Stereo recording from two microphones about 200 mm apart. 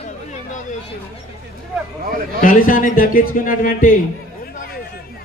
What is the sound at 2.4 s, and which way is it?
A man's voice, 45° left (ahead or behind).